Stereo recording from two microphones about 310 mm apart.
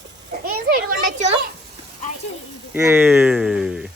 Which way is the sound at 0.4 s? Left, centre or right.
Right.